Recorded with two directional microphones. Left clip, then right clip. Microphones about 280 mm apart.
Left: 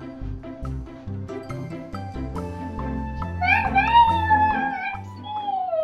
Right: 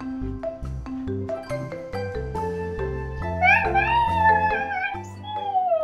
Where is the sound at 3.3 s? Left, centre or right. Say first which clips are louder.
Right 1 dB; centre.